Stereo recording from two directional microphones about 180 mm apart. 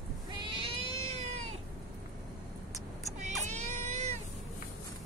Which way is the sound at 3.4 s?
40° right (ahead or behind).